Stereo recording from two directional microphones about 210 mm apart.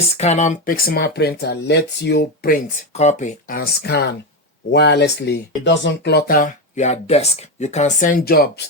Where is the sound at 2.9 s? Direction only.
35° left (ahead or behind).